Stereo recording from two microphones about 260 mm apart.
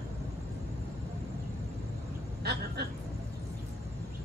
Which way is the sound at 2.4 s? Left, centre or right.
Right.